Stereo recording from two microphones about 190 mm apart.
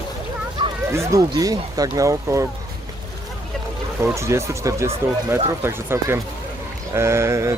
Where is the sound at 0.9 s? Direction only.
15° right (ahead or behind).